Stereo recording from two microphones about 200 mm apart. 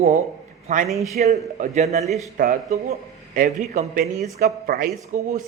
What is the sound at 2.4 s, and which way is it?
A man's voice, 45° right (ahead or behind).